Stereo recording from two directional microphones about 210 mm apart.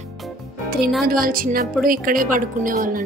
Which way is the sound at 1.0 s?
45° right (ahead or behind).